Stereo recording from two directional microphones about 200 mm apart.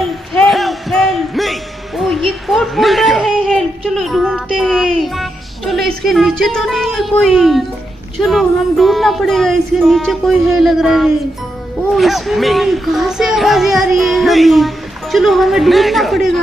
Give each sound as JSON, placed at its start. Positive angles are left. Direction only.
{"t": 0.3, "sound": "music", "side_deg": 0}
{"t": 6.0, "sound": "a child's voice", "side_deg": 0}